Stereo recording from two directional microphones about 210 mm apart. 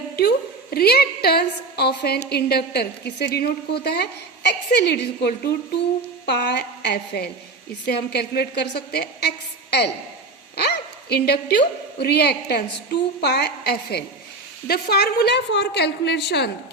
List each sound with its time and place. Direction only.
0.2 s a woman's voice: 50° left (ahead or behind)
11.1 s a woman's voice: 50° left (ahead or behind)